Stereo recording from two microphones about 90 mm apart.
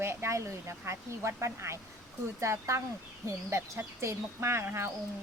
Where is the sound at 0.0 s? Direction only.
30° right (ahead or behind).